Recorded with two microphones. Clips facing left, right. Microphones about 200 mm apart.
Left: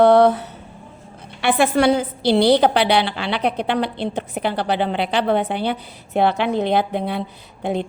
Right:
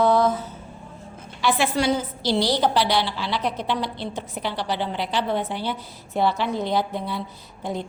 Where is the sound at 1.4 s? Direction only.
60° left (ahead or behind).